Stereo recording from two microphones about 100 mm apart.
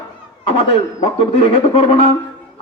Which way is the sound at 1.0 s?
70° left (ahead or behind).